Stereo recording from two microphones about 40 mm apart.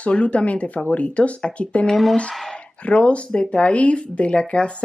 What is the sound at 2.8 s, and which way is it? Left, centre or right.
Speech, left.